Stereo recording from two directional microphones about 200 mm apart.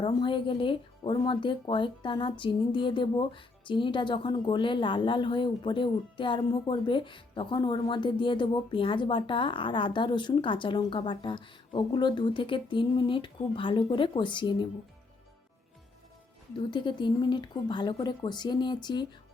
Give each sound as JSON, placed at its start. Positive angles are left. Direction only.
{"t": 0.0, "sound": "speech", "side_deg": 25}
{"t": 16.7, "sound": "speech", "side_deg": 25}